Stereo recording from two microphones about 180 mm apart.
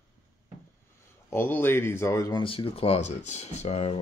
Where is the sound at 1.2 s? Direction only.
10° left (ahead or behind); by 3.9 s 35° left (ahead or behind).